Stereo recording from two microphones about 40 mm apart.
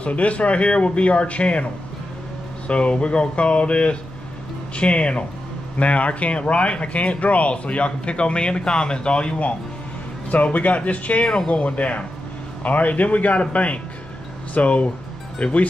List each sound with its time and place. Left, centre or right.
0.0 s speech: left
2.7 s speech: left
10.3 s speech: left
11.2 s speech: left
11.6 s speech: left